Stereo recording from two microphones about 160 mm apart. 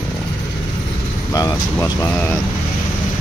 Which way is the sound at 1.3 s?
20° left (ahead or behind).